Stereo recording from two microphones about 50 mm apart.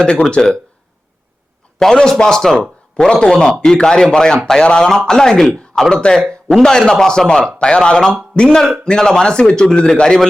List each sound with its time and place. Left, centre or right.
0.0 s a man's voice: centre
1.8 s a man's voice: centre